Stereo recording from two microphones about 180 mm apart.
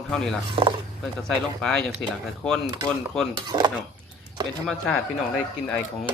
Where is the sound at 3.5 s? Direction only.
25° right (ahead or behind).